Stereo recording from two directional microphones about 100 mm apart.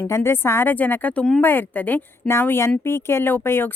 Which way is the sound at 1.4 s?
20° left (ahead or behind).